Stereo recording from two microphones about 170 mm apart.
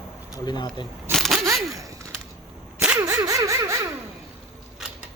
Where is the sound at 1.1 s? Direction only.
Centre (ahead or behind).